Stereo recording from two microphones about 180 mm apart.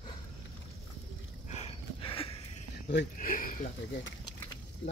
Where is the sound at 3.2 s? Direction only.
50° left (ahead or behind).